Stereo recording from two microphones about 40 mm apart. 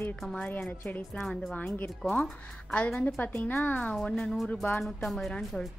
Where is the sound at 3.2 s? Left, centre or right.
Left.